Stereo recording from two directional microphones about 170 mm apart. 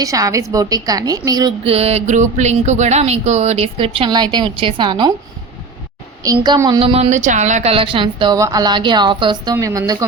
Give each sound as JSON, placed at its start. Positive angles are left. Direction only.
{"t": 0.0, "sound": "a woman's voice", "side_deg": -20}
{"t": 1.6, "sound": "speech", "side_deg": -35}
{"t": 6.2, "sound": "a woman's voice", "side_deg": -25}